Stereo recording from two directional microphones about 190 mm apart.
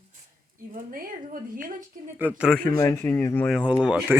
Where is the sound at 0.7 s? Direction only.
45° right (ahead or behind).